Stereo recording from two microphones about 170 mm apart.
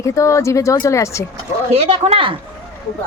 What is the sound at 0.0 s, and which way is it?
Speech, 15° left (ahead or behind).